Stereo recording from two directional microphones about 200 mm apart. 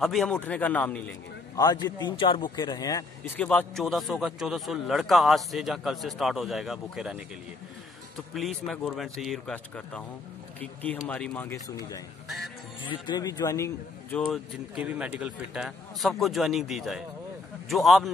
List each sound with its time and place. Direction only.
0.0 s speech: centre (ahead or behind)
1.6 s speech: 20° left (ahead or behind); by 7.2 s centre (ahead or behind)
8.4 s speech: centre (ahead or behind)
12.8 s speech: 25° left (ahead or behind)
14.1 s speech: 5° right (ahead or behind)